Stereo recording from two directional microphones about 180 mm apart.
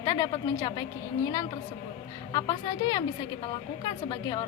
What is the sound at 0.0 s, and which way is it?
Speech, 25° left (ahead or behind).